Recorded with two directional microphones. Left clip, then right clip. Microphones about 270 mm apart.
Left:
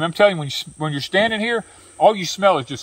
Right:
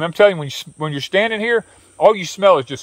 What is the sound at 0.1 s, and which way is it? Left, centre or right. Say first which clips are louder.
Speech: right 4 dB; centre.